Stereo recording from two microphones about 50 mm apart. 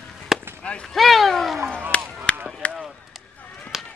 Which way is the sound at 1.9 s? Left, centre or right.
Left.